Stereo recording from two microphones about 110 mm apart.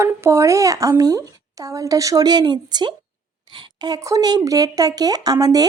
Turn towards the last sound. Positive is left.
turn(degrees=-35)  # may be behind; listen again after turning